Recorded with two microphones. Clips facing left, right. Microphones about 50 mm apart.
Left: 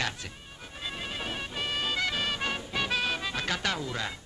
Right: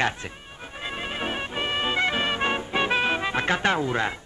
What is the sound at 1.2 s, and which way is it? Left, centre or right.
Music, right.